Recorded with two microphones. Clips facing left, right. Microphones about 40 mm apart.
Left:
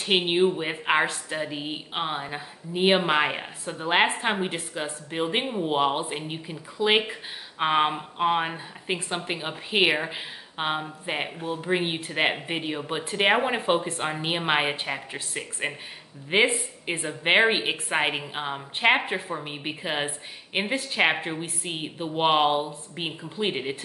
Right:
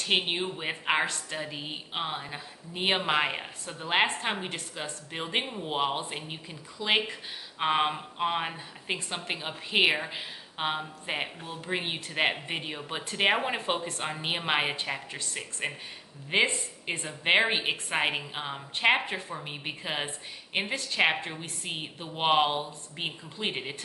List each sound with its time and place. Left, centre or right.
0.0 s speech: centre